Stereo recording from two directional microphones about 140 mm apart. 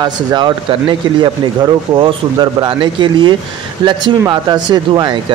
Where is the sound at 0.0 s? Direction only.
30° right (ahead or behind).